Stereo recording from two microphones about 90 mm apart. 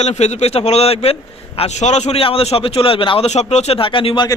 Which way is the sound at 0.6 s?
90° left.